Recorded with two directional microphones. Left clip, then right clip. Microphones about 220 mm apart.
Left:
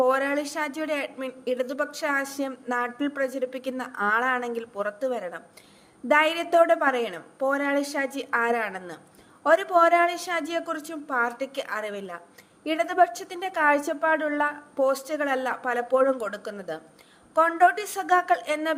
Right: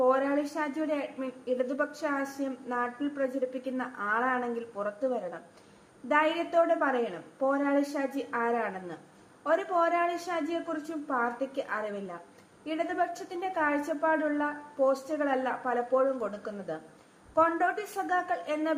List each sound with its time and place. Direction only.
0.0 s a woman's voice: 35° left (ahead or behind)